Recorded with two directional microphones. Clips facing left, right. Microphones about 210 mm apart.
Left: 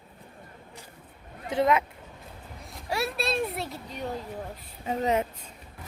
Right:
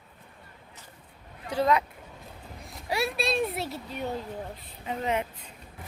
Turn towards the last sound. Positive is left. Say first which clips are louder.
# left 3 dB
turn(degrees=40)  # may be behind; listen again after turning